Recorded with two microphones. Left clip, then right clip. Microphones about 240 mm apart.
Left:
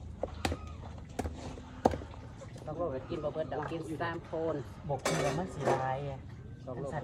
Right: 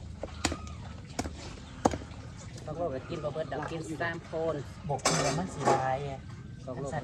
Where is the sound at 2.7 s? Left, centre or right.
Centre.